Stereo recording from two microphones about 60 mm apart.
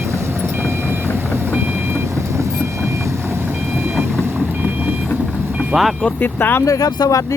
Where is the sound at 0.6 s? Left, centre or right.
Right.